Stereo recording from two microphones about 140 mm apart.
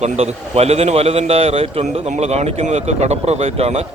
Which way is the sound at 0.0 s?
50° right (ahead or behind).